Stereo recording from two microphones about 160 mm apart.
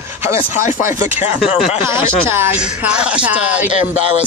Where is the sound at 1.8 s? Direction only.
15° right (ahead or behind).